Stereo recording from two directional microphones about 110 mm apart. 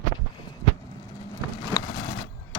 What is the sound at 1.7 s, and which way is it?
Vehicle, 25° left (ahead or behind).